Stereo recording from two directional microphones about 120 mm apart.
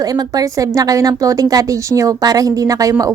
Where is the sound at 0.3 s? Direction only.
30° right (ahead or behind).